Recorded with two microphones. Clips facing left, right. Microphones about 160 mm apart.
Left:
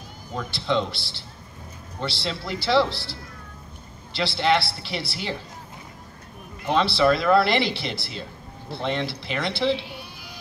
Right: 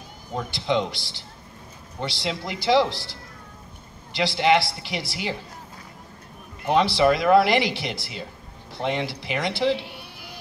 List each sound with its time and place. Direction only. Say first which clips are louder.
0.3 s speech: right 1 dB; 15° right (ahead or behind)
6.7 s speech: right 1 dB; 15° right (ahead or behind)
9.8 s sheep: even; 60° right (ahead or behind)